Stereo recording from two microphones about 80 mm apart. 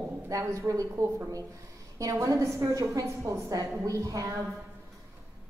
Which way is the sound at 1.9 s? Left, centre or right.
Right.